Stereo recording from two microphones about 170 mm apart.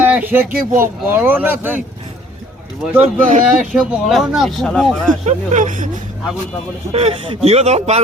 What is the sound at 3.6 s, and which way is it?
Speech, 5° right (ahead or behind).